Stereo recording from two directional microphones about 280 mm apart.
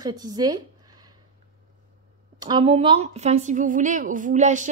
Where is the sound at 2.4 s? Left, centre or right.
Centre.